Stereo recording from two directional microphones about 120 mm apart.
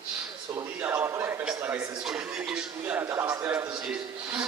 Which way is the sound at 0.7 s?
15° right (ahead or behind).